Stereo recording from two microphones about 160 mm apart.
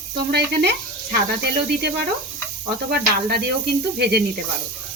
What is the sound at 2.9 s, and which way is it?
Speech, 70° right (ahead or behind).